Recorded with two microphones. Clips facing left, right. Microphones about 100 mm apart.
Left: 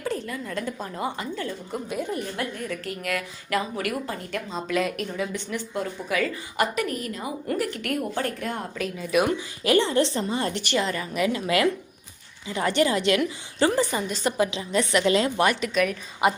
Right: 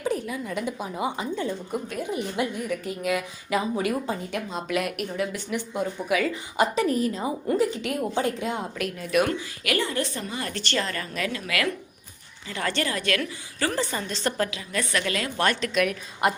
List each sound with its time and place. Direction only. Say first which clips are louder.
0.0 s a woman's voice: right 2 dB; 10° right (ahead or behind)
2.0 s a woman's voice: left 1 dB; centre (ahead or behind)
2.3 s a woman's voice: right 3 dB; 15° right (ahead or behind)
6.3 s a woman's voice: right 2 dB; 20° right (ahead or behind)
8.8 s a woman's voice: left 1 dB; centre (ahead or behind)
9.6 s a woman's voice: left 6 dB; 25° left (ahead or behind)
10.5 s a woman's voice: left 3 dB; 15° left (ahead or behind)
14.5 s a woman's voice: left 5 dB; 20° left (ahead or behind)
15.4 s a woman's voice: left 1 dB; 5° left (ahead or behind)